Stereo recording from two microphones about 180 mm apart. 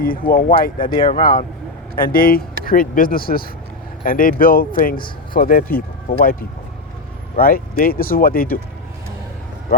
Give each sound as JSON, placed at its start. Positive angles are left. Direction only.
{"t": 0.0, "sound": "speech", "side_deg": 50}
{"t": 0.8, "sound": "speech", "side_deg": 25}
{"t": 1.1, "sound": "speech", "side_deg": 45}
{"t": 4.9, "sound": "speech", "side_deg": 25}
{"t": 5.4, "sound": "speech", "side_deg": 50}
{"t": 7.3, "sound": "speech", "side_deg": 55}